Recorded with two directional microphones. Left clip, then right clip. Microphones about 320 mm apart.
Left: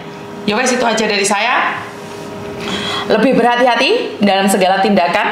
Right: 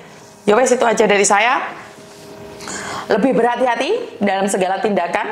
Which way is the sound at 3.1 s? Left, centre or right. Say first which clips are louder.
Left 3 dB; right.